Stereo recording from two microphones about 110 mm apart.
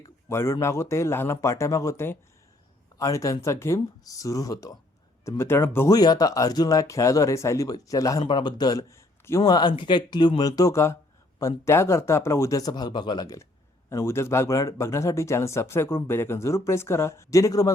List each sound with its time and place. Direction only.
0.0 s a sound: 25° left (ahead or behind)
0.6 s speech: 25° left (ahead or behind)
5.4 s speech: 20° left (ahead or behind)
5.9 s speech: 35° left (ahead or behind)
8.2 s speech: 45° left (ahead or behind); by 9.4 s 25° left (ahead or behind)
9.5 s speech: 40° left (ahead or behind)